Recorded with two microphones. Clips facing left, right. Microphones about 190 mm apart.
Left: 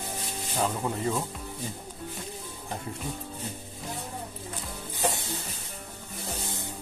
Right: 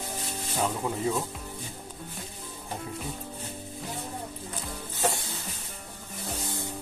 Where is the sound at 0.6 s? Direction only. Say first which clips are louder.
Even; centre (ahead or behind).